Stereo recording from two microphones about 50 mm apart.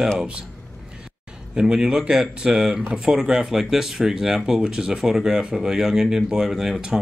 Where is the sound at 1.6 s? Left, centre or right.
Centre.